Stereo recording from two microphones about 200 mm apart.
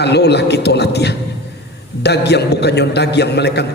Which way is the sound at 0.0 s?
55° left (ahead or behind).